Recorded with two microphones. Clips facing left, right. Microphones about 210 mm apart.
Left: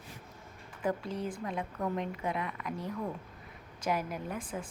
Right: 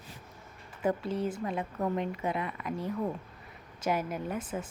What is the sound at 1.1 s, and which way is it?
Speech, 25° right (ahead or behind).